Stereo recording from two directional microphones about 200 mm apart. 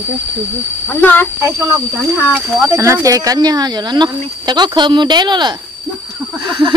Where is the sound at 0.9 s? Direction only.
10° left (ahead or behind).